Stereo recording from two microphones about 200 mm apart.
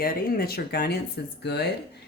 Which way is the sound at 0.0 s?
50° left (ahead or behind).